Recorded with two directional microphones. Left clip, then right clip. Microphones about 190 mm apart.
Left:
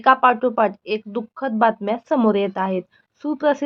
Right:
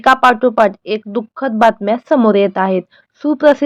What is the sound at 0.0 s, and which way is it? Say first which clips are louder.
Speech: right 5 dB; 25° right (ahead or behind).